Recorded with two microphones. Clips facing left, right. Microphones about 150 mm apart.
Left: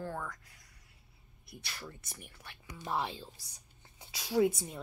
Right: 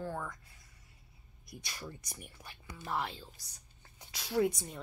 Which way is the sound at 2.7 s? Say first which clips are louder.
Left 2 dB; 15° left (ahead or behind).